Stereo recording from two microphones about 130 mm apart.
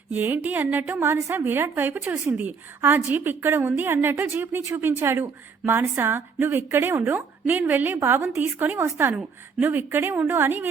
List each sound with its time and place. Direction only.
0.1 s a woman's voice: 15° right (ahead or behind)